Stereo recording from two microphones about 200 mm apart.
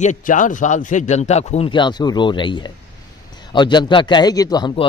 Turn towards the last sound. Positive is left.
turn(degrees=25)  # may be behind; listen again after turning